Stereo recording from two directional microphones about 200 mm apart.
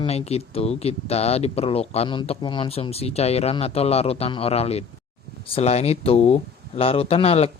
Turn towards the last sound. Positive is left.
turn(degrees=30)  # may be behind; listen again after turning